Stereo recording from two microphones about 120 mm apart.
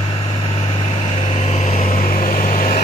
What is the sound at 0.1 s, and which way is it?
Vehicle, 55° left (ahead or behind).